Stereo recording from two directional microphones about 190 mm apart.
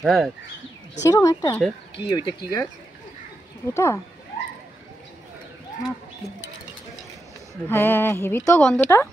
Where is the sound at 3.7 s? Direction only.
15° left (ahead or behind).